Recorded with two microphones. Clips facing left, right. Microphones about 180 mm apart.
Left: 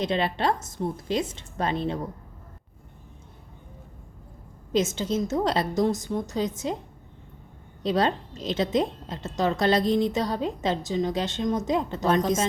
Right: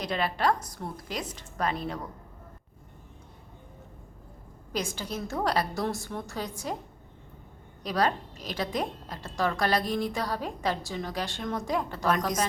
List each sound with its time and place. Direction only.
0.0 s a woman's voice: 25° left (ahead or behind)
4.7 s a woman's voice: 25° left (ahead or behind)
7.8 s a woman's voice: 25° left (ahead or behind)